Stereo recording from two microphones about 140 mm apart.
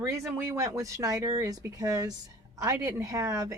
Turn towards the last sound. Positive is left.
turn(degrees=-20)  # may be behind; listen again after turning